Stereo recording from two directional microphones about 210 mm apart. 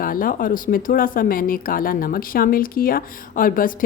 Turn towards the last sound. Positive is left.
turn(degrees=40)  # may be behind; listen again after turning